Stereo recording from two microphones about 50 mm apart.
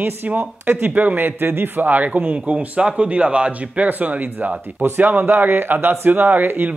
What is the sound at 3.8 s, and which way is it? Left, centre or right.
Speech, right.